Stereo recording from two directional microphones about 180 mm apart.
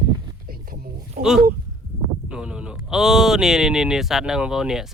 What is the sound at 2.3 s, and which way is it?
Speech, 5° right (ahead or behind).